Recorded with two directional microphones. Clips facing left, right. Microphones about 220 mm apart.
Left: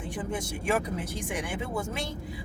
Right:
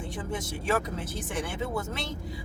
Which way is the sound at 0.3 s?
15° left (ahead or behind).